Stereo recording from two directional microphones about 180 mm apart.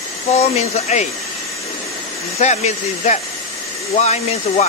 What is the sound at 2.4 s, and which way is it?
Speech, 40° left (ahead or behind).